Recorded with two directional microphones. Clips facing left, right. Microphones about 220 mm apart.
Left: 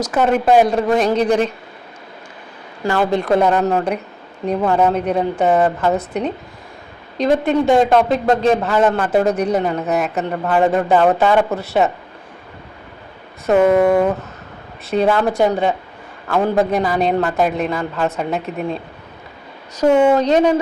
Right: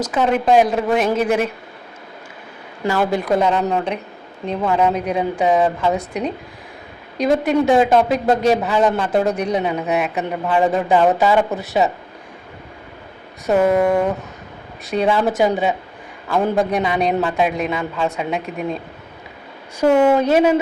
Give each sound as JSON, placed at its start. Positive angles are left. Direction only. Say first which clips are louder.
{"t": 0.1, "sound": "a woman's voice", "louder": "left 2 dB", "side_deg": 5}
{"t": 2.8, "sound": "a woman's voice", "louder": "left 1 dB", "side_deg": -5}
{"t": 7.2, "sound": "a woman's voice", "louder": "left 1 dB", "side_deg": 0}
{"t": 8.4, "sound": "speech", "louder": "left 1 dB", "side_deg": -15}
{"t": 8.8, "sound": "a woman's voice", "louder": "left 2 dB", "side_deg": 5}
{"t": 9.6, "sound": "a woman's voice", "louder": "left 1 dB", "side_deg": -10}
{"t": 13.5, "sound": "a woman's voice", "louder": "left 3 dB", "side_deg": 0}